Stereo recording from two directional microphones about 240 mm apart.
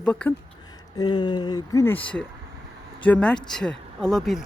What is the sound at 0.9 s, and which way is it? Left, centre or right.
Speech, centre.